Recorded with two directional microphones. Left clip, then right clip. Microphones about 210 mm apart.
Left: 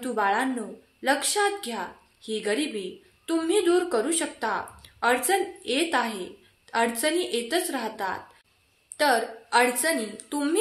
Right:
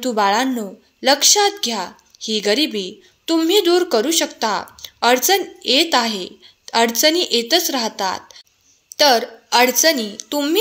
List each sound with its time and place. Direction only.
0.0 s a woman's voice: 45° right (ahead or behind)